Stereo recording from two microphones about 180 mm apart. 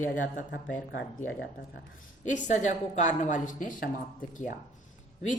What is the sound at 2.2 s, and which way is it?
A woman's voice, 45° left (ahead or behind).